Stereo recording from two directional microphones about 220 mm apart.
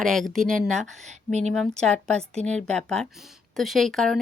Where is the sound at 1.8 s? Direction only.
5° left (ahead or behind).